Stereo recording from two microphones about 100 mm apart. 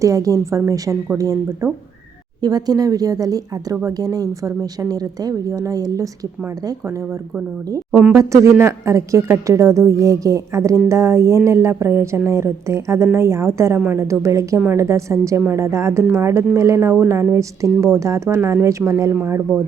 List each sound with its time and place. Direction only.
0.0 s a woman's voice: 35° right (ahead or behind)
8.2 s a woman's voice: 30° right (ahead or behind)